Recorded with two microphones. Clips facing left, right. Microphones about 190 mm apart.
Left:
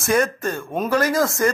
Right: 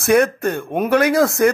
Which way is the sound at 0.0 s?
65° right (ahead or behind).